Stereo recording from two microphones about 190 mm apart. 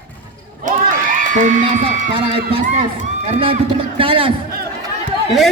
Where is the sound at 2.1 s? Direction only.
35° right (ahead or behind).